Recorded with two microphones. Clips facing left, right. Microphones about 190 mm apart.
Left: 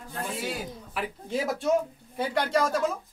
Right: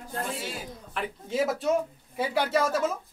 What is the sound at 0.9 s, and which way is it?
Speech, centre (ahead or behind).